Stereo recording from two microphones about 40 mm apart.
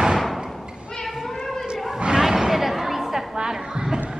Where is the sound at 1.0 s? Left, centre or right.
Centre.